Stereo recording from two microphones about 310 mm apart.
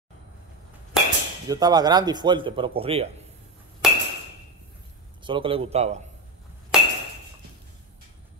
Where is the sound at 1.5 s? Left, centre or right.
Centre.